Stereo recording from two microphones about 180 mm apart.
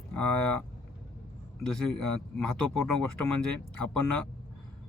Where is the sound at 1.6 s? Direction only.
Centre (ahead or behind).